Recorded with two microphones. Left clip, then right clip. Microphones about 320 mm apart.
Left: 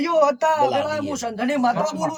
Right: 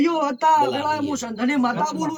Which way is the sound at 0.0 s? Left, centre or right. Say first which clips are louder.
Left 2 dB; centre.